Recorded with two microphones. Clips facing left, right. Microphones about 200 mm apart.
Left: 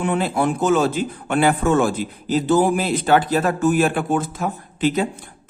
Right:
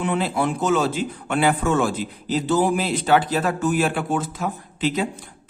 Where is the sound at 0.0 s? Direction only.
50° left (ahead or behind).